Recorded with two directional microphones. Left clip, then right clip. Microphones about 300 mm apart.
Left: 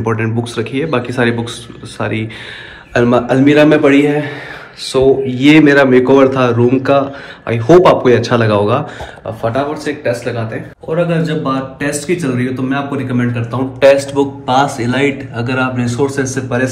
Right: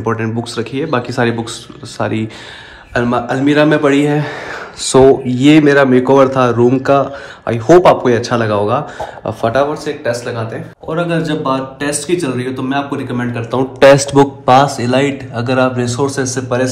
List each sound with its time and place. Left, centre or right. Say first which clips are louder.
0.0 s speech: left 1 dB; centre
9.2 s speech: right 3 dB; right
11.1 s speech: right 1 dB; centre
13.4 s speech: right 3 dB; right; by 16.6 s centre